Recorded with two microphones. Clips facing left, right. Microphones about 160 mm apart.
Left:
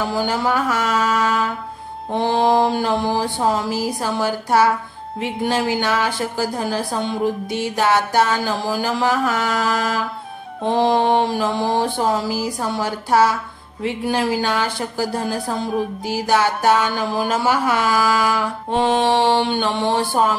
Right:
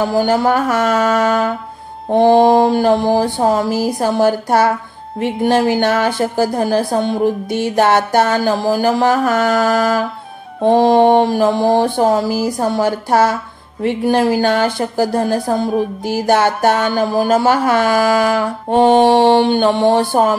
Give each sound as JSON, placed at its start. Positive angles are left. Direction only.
{"t": 0.1, "sound": "speech", "side_deg": -50}